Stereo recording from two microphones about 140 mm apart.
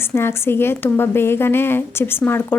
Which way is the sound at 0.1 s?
15° left (ahead or behind).